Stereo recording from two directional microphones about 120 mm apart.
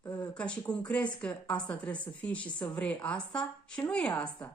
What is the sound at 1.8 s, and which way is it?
Speech, 10° left (ahead or behind).